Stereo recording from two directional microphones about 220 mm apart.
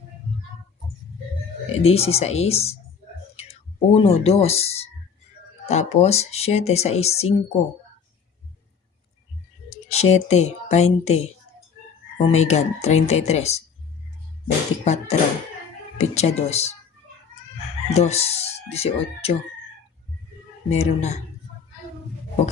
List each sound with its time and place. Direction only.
1.8 s speech: 25° left (ahead or behind)
9.6 s speech: 30° left (ahead or behind)
14.4 s beatboxing: 30° left (ahead or behind)
16.0 s speech: 30° left (ahead or behind)
17.9 s speech: 30° left (ahead or behind)
20.7 s speech: 30° left (ahead or behind)